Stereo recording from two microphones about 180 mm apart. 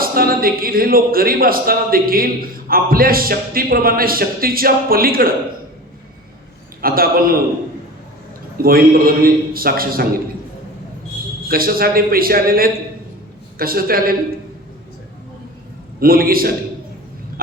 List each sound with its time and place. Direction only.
0.0 s a man's voice: 55° right (ahead or behind)
6.8 s a man's voice: 55° right (ahead or behind)
8.6 s a man's voice: 55° right (ahead or behind)
11.4 s a man's voice: 55° right (ahead or behind)
16.0 s a man's voice: 55° right (ahead or behind)